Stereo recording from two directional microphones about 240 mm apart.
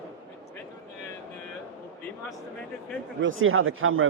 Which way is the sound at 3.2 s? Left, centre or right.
Right.